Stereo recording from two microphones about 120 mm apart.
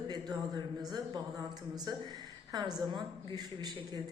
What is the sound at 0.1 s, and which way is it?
Speech, 35° right (ahead or behind).